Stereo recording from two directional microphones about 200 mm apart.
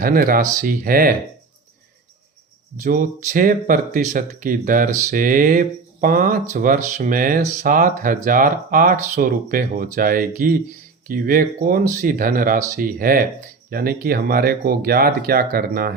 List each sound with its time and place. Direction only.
0.0 s speech: 45° right (ahead or behind)
2.8 s speech: 40° right (ahead or behind)